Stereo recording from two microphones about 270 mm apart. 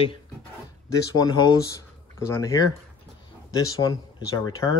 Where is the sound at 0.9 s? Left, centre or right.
Centre.